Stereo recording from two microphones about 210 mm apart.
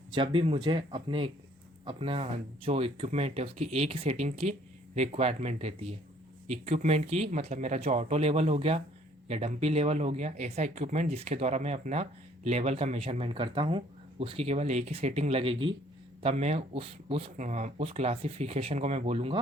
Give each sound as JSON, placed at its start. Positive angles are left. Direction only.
{"t": 0.1, "sound": "speech", "side_deg": -25}